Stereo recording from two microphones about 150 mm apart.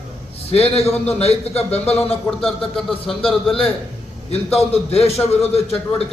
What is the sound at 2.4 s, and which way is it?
Speech, 5° left (ahead or behind).